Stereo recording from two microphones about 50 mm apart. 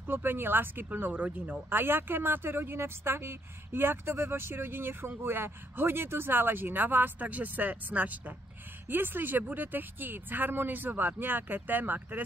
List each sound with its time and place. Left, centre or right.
0.0 s speech: right
1.7 s speech: right